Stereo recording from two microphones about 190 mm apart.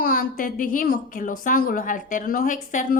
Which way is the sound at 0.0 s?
45° left (ahead or behind).